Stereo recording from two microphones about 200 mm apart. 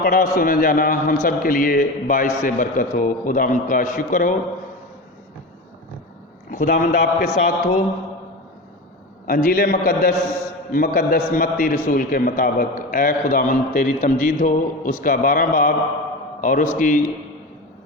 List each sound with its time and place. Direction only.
0.0 s a man's voice: 45° left (ahead or behind)
6.5 s a man's voice: 45° left (ahead or behind)
9.2 s a man's voice: 45° left (ahead or behind)